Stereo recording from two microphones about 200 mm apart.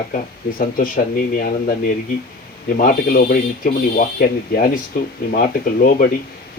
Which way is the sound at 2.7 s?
45° left (ahead or behind).